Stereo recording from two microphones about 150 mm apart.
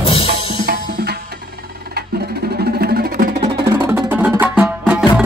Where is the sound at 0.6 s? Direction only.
90° right.